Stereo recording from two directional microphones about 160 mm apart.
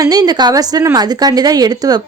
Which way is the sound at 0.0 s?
25° right (ahead or behind).